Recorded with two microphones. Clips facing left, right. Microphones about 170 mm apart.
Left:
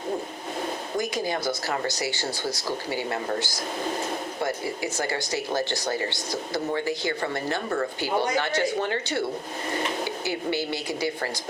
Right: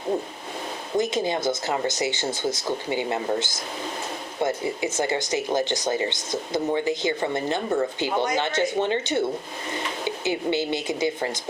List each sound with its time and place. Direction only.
0.9 s a woman's voice: 25° right (ahead or behind)